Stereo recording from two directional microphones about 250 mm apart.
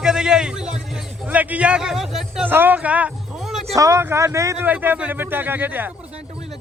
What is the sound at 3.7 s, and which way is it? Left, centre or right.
Speech, centre.